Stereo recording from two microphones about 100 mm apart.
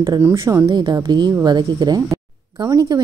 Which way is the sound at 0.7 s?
50° right (ahead or behind).